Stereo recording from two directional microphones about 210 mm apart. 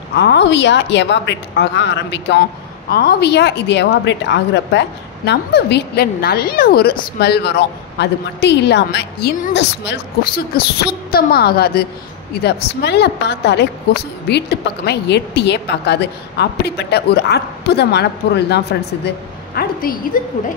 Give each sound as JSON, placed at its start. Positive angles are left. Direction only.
{"t": 0.1, "sound": "a woman's voice", "side_deg": 55}